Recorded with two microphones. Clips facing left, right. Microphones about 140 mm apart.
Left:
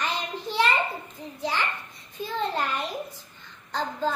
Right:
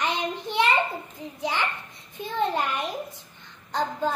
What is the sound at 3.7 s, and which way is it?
Speech, 15° right (ahead or behind).